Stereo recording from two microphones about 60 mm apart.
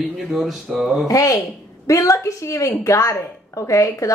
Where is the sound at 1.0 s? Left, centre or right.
Left.